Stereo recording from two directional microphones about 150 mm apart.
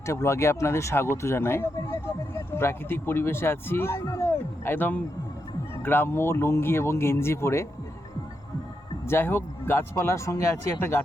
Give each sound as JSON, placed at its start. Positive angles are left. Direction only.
{"t": 0.0, "sound": "speech", "side_deg": 20}
{"t": 9.0, "sound": "speech", "side_deg": 15}